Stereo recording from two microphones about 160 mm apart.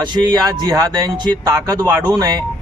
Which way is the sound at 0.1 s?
25° right (ahead or behind).